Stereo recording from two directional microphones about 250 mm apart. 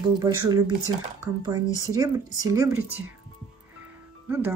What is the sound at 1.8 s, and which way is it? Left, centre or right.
Speech, centre.